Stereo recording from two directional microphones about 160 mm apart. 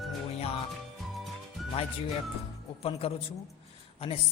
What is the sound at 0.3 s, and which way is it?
Music, 40° left (ahead or behind).